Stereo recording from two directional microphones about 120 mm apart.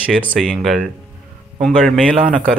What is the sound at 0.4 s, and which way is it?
Speech, centre (ahead or behind).